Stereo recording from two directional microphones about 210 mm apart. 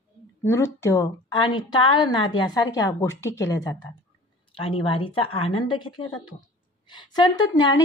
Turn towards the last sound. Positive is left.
turn(degrees=20)  # may be behind; listen again after turning